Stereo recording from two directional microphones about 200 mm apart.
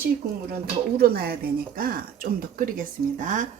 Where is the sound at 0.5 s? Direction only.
50° right (ahead or behind).